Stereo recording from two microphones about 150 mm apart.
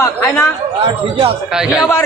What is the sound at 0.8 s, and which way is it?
Speech, 40° right (ahead or behind).